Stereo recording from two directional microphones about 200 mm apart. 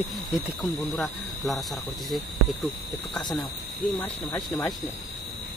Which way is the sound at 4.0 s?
20° left (ahead or behind).